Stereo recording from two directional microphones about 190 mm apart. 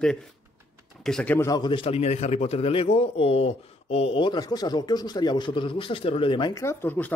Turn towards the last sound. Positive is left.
turn(degrees=10)  # may be behind; listen again after turning